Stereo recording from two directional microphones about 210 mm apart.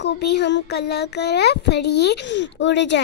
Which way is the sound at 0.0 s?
55° left (ahead or behind).